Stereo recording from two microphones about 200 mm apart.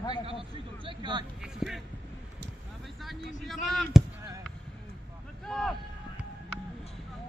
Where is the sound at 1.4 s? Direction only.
Centre (ahead or behind).